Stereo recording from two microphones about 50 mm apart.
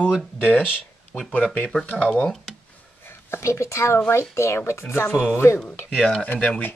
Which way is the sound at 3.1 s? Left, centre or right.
Left.